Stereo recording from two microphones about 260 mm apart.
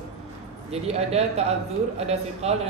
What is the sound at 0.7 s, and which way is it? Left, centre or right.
A man's voice, right.